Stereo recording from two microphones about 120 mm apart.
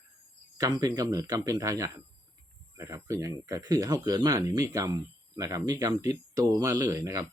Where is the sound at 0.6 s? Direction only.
30° right (ahead or behind).